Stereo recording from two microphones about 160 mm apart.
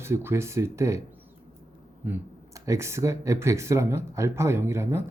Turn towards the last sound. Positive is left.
turn(degrees=-15)  # may be behind; listen again after turning